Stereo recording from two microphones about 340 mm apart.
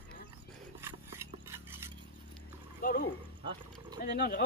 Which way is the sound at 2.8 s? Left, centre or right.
Left.